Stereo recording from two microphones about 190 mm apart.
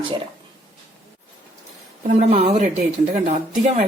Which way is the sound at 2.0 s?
35° right (ahead or behind).